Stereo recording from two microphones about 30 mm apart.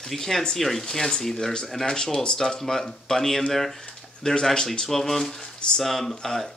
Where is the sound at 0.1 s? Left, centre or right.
Centre.